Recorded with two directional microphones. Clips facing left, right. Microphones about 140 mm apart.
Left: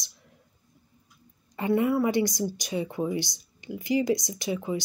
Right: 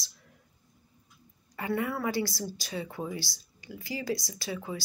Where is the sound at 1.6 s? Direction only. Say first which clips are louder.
Left 7 dB; 20° left (ahead or behind).